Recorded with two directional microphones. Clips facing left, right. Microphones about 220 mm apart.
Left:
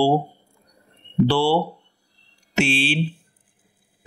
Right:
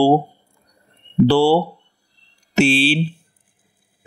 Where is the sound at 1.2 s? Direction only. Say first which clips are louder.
Right 6 dB; 40° right (ahead or behind).